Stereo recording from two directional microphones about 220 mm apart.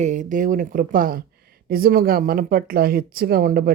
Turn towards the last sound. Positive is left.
turn(degrees=-40)  # may be behind; listen again after turning